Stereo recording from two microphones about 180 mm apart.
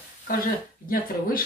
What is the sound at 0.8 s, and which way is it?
Speech, 50° left (ahead or behind).